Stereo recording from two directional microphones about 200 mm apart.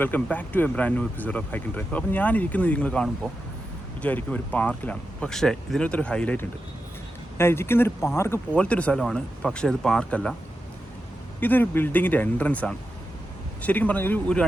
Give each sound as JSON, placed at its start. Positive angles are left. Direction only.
{"t": 0.0, "sound": "speech", "side_deg": 10}
{"t": 11.3, "sound": "speech", "side_deg": 10}